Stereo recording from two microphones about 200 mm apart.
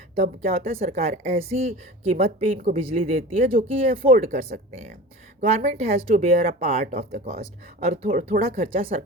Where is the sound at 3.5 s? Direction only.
30° right (ahead or behind).